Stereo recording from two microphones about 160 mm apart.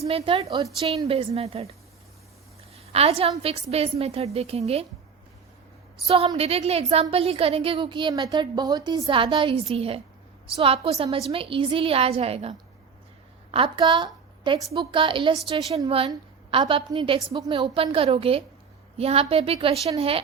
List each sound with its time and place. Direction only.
0.0 s a woman's voice: 35° right (ahead or behind)
2.7 s a woman's voice: 40° right (ahead or behind)
6.1 s a woman's voice: 40° right (ahead or behind)
16.5 s a woman's voice: 35° right (ahead or behind)